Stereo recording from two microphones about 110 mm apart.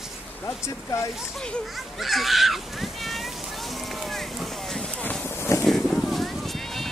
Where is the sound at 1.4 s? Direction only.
5° left (ahead or behind).